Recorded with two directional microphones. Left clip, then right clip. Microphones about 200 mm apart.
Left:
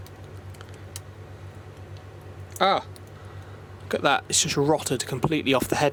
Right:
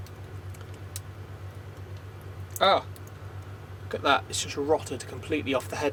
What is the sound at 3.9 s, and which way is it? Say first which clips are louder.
Speech: left 2 dB; 55° left (ahead or behind).